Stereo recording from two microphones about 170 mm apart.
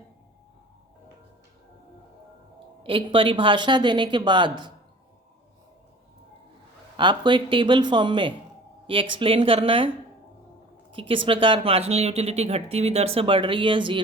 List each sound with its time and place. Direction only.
2.8 s speech: 30° right (ahead or behind)
6.9 s speech: 25° right (ahead or behind)
10.9 s speech: 30° right (ahead or behind)